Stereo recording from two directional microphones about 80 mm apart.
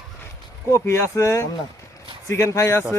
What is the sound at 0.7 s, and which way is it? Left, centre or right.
Speech, left.